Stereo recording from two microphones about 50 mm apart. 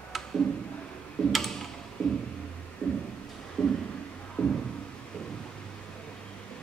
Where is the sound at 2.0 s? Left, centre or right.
Centre.